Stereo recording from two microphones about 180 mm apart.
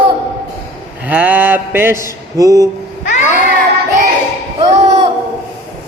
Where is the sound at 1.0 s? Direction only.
10° right (ahead or behind).